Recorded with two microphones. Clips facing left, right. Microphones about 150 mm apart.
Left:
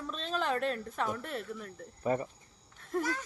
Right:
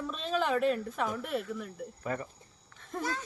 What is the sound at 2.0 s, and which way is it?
Speech, 25° left (ahead or behind).